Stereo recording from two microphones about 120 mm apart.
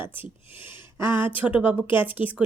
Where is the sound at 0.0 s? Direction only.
15° right (ahead or behind).